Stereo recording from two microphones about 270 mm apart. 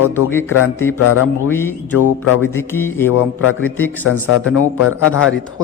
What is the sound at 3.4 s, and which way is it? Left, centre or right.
Speech, left.